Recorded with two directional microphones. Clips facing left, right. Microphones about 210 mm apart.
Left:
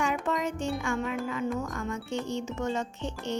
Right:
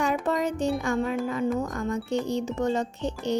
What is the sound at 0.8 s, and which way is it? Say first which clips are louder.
Music: right 4 dB; 35° right (ahead or behind).